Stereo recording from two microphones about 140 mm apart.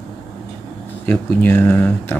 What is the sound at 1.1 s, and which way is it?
Speech, 15° left (ahead or behind).